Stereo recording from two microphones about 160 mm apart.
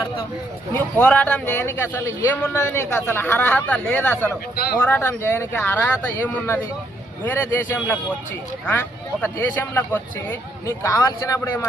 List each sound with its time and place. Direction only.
0.7 s a man's voice: 10° left (ahead or behind)
9.2 s a man's voice: 10° left (ahead or behind)